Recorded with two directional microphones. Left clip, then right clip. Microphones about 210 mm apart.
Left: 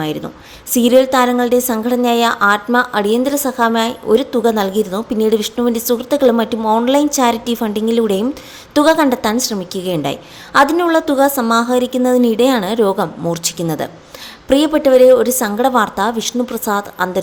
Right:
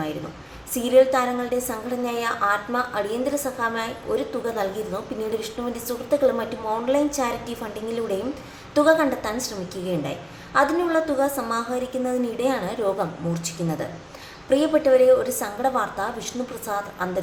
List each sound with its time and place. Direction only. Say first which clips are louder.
0.7 s a woman's voice: left 6 dB; 45° left (ahead or behind)